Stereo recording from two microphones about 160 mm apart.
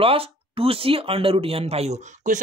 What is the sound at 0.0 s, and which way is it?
Speech, 35° right (ahead or behind).